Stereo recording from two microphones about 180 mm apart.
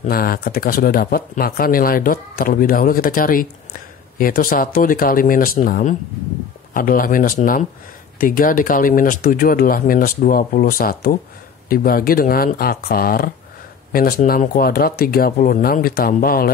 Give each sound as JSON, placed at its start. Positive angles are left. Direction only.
{"t": 0.0, "sound": "speech", "side_deg": 55}